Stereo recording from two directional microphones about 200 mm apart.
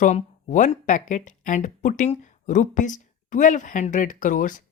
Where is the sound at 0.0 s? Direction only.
40° left (ahead or behind).